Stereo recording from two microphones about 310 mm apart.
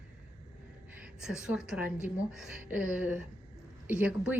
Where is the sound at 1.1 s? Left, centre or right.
Centre.